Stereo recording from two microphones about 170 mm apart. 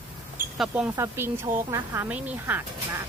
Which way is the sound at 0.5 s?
5° right (ahead or behind).